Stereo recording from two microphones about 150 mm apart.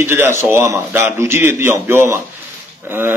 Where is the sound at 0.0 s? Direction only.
15° right (ahead or behind).